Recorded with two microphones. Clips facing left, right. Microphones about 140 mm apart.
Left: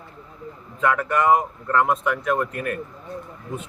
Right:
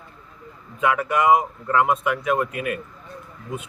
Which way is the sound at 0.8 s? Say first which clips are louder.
Even; 10° right (ahead or behind).